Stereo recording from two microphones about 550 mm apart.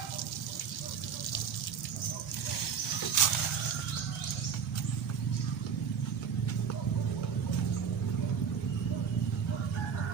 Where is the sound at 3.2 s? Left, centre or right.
Left.